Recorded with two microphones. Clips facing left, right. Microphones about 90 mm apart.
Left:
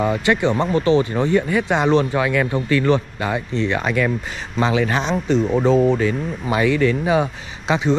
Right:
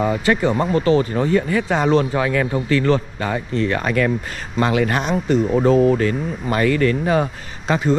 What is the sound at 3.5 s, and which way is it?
Speech, 45° right (ahead or behind).